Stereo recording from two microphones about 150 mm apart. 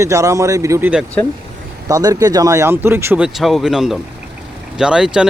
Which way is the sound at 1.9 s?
25° right (ahead or behind).